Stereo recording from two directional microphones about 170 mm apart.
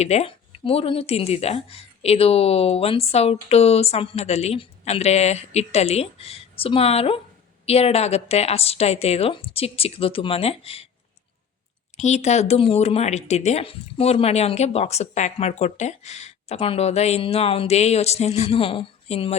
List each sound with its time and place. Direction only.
0.0 s speech: 40° left (ahead or behind)
11.9 s speech: 40° left (ahead or behind)